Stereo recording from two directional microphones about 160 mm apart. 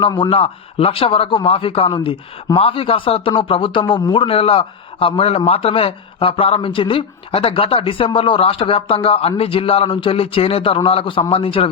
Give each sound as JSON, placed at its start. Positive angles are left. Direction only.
{"t": 0.0, "sound": "speech", "side_deg": 30}